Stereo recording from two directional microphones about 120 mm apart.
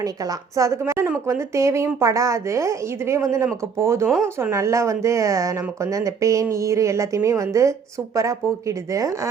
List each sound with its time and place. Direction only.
0.0 s speech: 30° right (ahead or behind)